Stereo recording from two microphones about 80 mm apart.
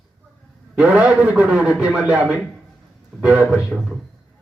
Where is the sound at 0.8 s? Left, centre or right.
Centre.